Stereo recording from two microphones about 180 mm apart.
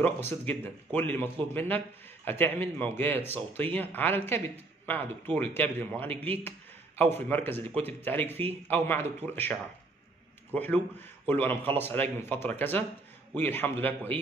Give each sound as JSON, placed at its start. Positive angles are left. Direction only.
{"t": 0.0, "sound": "speech", "side_deg": 10}